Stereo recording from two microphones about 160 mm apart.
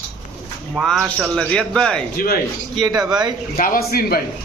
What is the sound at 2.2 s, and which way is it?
Speech, 65° left (ahead or behind).